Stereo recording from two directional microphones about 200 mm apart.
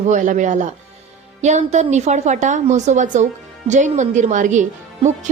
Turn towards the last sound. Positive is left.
turn(degrees=-40)  # may be behind; listen again after turning